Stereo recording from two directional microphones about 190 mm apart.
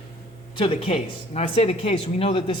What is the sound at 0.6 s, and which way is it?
Speech, 30° left (ahead or behind).